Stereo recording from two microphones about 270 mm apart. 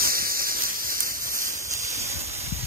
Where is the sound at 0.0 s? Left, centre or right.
Right.